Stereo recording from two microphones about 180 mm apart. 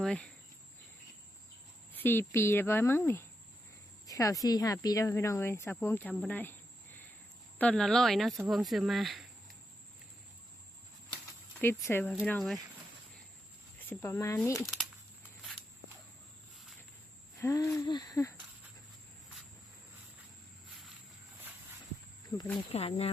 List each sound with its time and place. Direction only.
0.0 s speech: 5° left (ahead or behind)
1.9 s speech: 10° left (ahead or behind)
11.6 s speech: 15° left (ahead or behind)
13.7 s speech: 10° left (ahead or behind)
14.7 s a sound: centre (ahead or behind)
17.4 s speech: 15° left (ahead or behind)
22.5 s speech: 30° left (ahead or behind)